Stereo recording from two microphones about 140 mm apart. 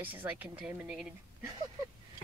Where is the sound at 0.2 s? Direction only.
10° right (ahead or behind).